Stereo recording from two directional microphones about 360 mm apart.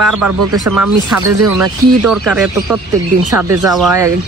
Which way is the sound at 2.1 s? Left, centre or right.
Centre.